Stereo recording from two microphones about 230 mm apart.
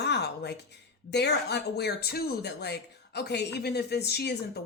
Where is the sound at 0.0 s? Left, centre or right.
Left.